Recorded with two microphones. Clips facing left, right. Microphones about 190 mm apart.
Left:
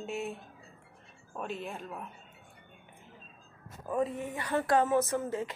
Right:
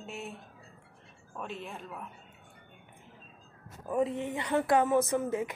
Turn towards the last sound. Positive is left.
turn(degrees=-15)  # may be behind; listen again after turning